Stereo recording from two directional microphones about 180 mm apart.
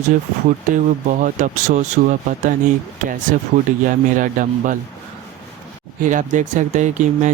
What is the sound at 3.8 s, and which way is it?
Speech, 45° right (ahead or behind).